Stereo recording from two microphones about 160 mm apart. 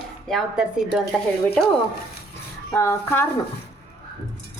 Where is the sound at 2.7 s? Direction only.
15° left (ahead or behind).